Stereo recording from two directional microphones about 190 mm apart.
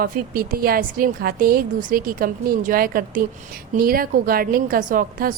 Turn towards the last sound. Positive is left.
turn(degrees=-45)  # may be behind; listen again after turning